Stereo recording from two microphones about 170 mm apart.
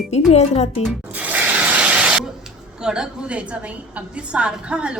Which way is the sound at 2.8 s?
5° right (ahead or behind).